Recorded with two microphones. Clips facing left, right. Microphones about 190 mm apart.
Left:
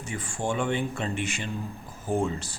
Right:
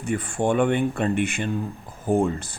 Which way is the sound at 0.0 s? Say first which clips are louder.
Right 8 dB; 60° right (ahead or behind).